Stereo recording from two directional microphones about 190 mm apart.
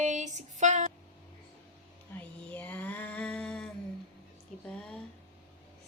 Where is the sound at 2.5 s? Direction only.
10° left (ahead or behind).